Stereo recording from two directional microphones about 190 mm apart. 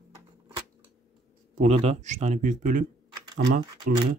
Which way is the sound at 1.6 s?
35° right (ahead or behind).